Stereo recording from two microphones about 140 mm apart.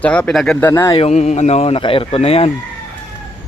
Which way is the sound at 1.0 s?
50° left (ahead or behind).